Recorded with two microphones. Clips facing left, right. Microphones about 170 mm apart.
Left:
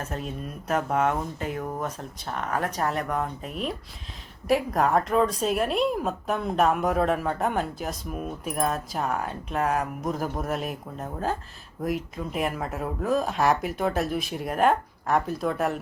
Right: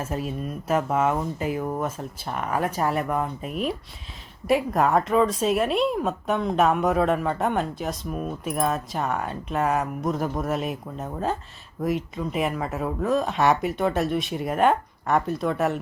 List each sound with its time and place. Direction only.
0.0 s speech: 5° right (ahead or behind)